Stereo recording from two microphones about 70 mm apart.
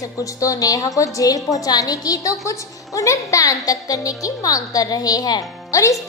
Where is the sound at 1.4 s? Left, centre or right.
Centre.